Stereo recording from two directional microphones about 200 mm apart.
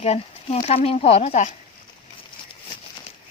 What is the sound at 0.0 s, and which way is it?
Speech, 30° left (ahead or behind).